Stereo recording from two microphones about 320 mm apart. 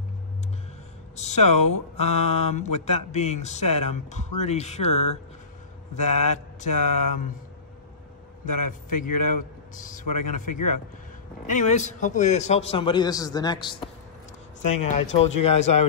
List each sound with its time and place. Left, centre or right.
1.1 s speech: left
8.6 s a man's voice: left